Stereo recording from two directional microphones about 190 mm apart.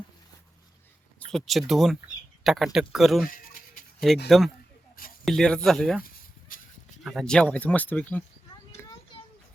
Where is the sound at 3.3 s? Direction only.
45° left (ahead or behind).